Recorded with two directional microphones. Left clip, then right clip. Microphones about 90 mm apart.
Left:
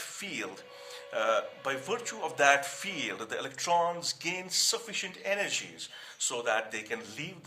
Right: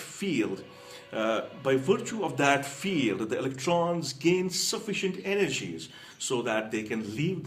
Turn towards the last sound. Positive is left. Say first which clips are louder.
# right 5 dB
turn(degrees=35)  # may be behind; listen again after turning